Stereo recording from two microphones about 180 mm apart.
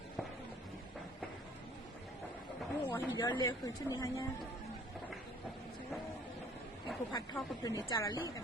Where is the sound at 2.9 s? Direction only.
25° left (ahead or behind).